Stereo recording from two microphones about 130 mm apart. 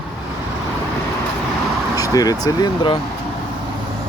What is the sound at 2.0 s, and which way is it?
Speech, 30° left (ahead or behind).